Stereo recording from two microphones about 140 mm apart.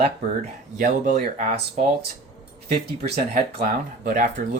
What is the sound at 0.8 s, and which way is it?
Speech, 65° right (ahead or behind).